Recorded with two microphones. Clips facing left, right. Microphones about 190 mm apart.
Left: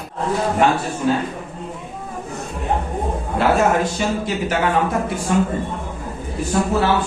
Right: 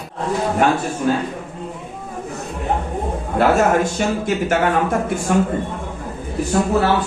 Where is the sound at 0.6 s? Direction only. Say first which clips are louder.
Right 1 dB; 45° right (ahead or behind).